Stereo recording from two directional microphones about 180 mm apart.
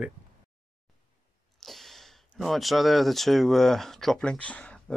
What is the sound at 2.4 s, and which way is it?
Speech, centre (ahead or behind).